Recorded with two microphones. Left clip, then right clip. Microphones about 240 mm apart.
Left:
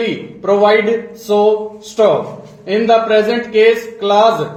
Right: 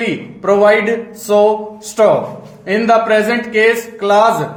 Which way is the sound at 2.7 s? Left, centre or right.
Right.